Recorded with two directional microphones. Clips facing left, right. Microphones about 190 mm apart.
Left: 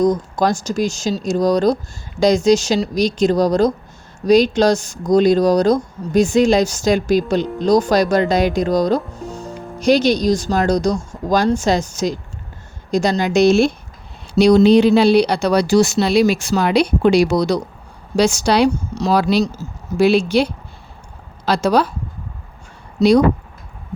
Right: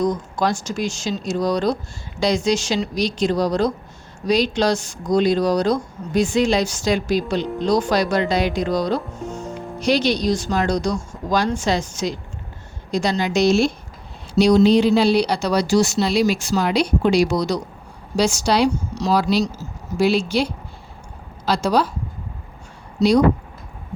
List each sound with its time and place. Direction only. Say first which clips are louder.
0.0 s speech: left 5 dB; 40° left (ahead or behind); by 21.8 s 60° left (ahead or behind)
23.0 s speech: left 3 dB; 60° left (ahead or behind)